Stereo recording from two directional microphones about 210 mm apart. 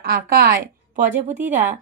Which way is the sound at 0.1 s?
40° right (ahead or behind).